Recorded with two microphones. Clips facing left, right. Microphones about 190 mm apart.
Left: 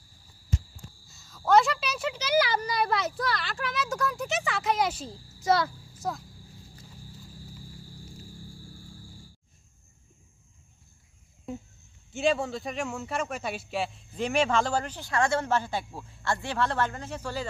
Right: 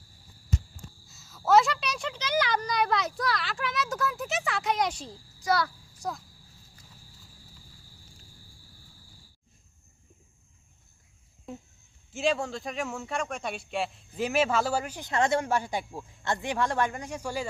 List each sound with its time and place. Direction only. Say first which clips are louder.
1.0 s a woman's voice: even; centre (ahead or behind)
5.4 s a child's voice: left 2 dB; 25° left (ahead or behind)
6.0 s speech: left 2 dB; centre (ahead or behind)
12.1 s speech: left 2 dB; centre (ahead or behind)